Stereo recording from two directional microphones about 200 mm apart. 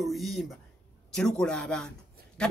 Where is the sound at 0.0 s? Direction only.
Centre (ahead or behind).